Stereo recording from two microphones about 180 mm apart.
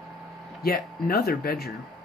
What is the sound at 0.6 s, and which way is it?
Speech, 55° left (ahead or behind).